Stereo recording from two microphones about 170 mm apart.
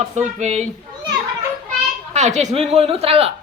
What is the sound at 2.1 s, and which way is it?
Speech, 45° right (ahead or behind).